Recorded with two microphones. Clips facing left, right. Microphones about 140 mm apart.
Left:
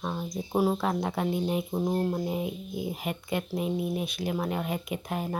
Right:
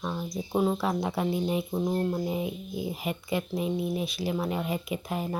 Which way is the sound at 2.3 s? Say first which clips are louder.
Even; centre (ahead or behind).